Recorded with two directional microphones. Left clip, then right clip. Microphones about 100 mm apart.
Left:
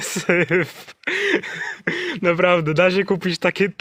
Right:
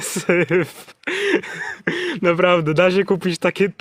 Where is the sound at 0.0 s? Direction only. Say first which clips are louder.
Even; 30° right (ahead or behind).